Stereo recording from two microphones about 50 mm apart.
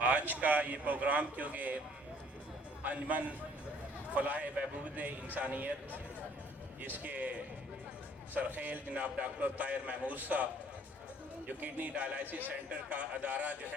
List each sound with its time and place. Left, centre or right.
0.0 s a man's voice: right
2.8 s a man's voice: right
11.4 s a man's voice: right